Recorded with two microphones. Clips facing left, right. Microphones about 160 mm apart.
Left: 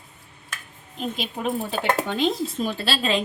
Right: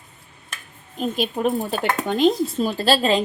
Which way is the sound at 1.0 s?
45° right (ahead or behind).